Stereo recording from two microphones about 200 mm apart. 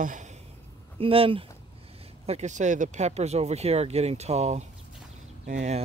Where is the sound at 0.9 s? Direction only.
25° right (ahead or behind).